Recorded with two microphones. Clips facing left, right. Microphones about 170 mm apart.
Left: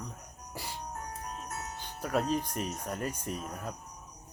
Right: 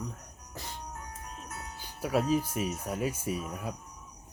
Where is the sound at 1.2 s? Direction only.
40° left (ahead or behind).